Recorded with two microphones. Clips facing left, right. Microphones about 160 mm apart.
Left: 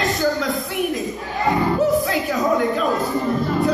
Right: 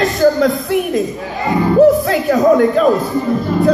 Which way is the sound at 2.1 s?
60° right (ahead or behind).